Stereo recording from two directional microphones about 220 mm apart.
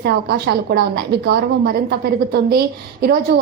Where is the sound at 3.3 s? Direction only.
50° right (ahead or behind).